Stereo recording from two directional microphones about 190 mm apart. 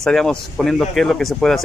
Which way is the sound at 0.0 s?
5° left (ahead or behind).